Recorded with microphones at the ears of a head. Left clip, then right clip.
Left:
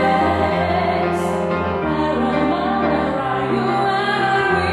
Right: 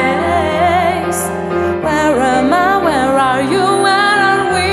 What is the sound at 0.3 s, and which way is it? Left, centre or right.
Music, right.